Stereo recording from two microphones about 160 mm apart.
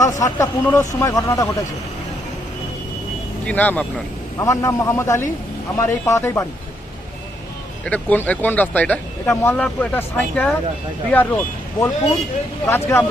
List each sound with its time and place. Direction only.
0.0 s speech: 20° left (ahead or behind)
3.4 s speech: 10° left (ahead or behind)
7.9 s speech: 10° left (ahead or behind)